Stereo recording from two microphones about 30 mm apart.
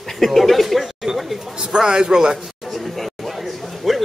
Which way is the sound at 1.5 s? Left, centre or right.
Right.